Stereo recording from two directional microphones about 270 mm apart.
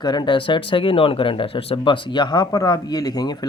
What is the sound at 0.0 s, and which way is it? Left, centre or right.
Speech, centre.